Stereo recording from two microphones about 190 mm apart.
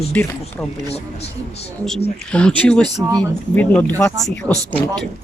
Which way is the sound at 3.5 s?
10° left (ahead or behind).